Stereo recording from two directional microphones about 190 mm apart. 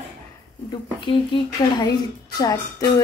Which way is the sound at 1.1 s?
25° left (ahead or behind).